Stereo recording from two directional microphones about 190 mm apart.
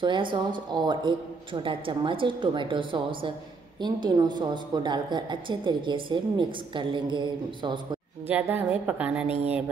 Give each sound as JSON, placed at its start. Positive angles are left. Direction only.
{"t": 0.0, "sound": "a woman's voice", "side_deg": -25}
{"t": 8.3, "sound": "a woman's voice", "side_deg": -10}